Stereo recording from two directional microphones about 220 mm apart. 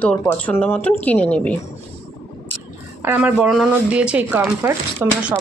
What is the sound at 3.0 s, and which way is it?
Speech, 5° right (ahead or behind).